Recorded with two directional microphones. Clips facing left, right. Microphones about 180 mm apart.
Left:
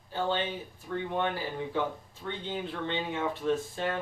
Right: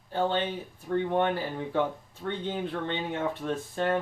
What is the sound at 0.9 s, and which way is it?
Speech, 50° right (ahead or behind).